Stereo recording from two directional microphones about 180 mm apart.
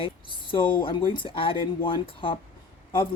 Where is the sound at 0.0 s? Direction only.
30° left (ahead or behind).